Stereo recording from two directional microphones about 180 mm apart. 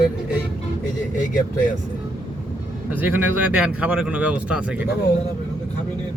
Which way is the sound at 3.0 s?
10° right (ahead or behind).